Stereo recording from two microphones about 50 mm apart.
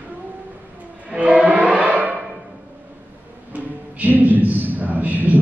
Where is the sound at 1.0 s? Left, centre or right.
Right.